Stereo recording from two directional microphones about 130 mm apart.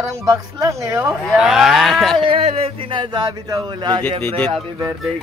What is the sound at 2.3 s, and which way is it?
Speech, 55° right (ahead or behind).